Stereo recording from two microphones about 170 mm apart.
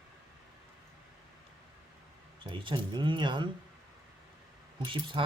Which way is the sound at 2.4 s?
30° right (ahead or behind).